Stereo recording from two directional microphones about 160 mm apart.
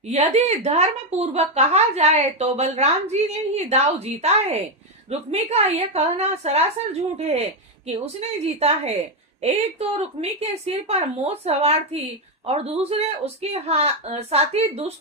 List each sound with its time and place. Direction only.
0.1 s a woman's voice: 40° right (ahead or behind)